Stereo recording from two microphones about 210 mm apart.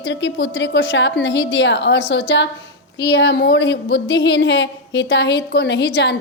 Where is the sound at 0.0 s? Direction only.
60° left (ahead or behind).